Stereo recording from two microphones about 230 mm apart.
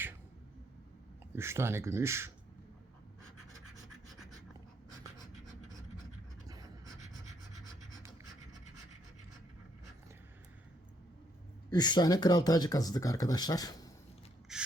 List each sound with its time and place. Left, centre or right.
1.4 s speech: centre
11.7 s speech: centre
14.5 s rub: centre